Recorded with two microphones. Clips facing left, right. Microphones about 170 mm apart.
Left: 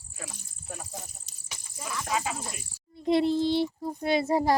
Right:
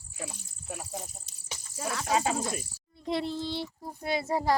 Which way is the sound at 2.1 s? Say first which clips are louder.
Right 5 dB; 30° right (ahead or behind).